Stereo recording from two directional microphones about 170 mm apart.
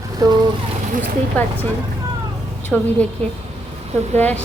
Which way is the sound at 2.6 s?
10° left (ahead or behind).